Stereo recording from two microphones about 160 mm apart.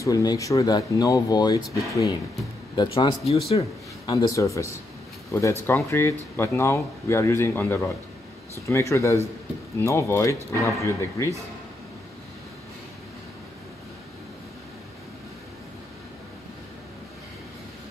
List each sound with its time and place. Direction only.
0.0 s speech: 20° left (ahead or behind)
3.4 s speech: 40° left (ahead or behind)
4.1 s speech: 20° left (ahead or behind)